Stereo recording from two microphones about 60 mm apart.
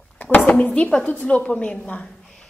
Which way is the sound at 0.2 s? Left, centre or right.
Left.